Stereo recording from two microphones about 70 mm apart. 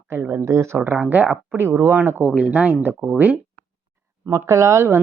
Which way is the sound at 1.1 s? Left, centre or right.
Right.